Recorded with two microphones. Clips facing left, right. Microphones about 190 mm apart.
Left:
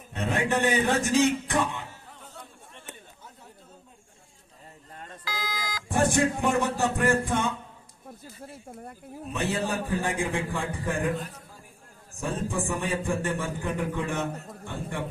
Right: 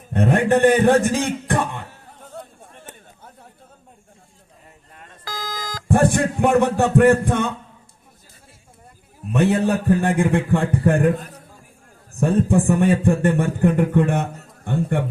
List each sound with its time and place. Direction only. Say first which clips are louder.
0.1 s a man's voice: right 10 dB; 55° right (ahead or behind)
5.2 s beep: right 4 dB; 45° right (ahead or behind)
9.3 s a man's voice: right 11 dB; 60° right (ahead or behind)
12.2 s a man's voice: right 12 dB; 60° right (ahead or behind)